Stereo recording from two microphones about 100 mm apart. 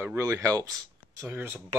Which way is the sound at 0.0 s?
25° right (ahead or behind).